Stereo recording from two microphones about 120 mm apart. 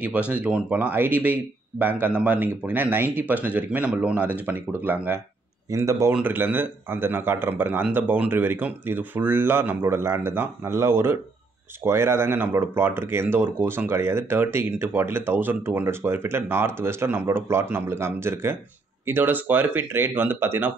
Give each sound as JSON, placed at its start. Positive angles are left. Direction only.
{"t": 0.0, "sound": "speech", "side_deg": -10}
{"t": 5.7, "sound": "speech", "side_deg": -25}